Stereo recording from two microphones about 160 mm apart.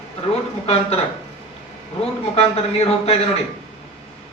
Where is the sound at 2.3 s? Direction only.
40° left (ahead or behind).